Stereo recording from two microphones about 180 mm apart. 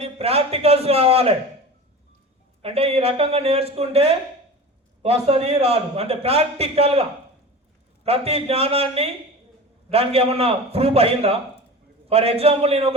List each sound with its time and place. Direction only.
0.0 s a man's voice: 35° right (ahead or behind)
2.6 s a man's voice: 35° right (ahead or behind)
8.0 s a man's voice: 35° right (ahead or behind)